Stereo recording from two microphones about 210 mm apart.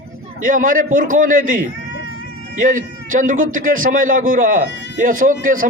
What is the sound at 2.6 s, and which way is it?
A man's voice, 40° right (ahead or behind).